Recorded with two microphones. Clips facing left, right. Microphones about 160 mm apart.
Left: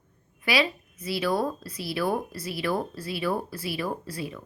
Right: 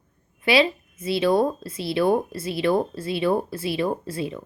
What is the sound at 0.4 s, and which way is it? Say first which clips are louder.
A woman's voice: right 6 dB; 25° right (ahead or behind).